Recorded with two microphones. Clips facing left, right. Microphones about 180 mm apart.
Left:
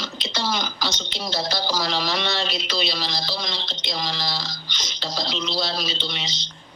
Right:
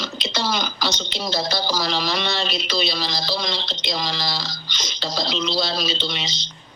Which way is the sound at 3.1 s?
90° right.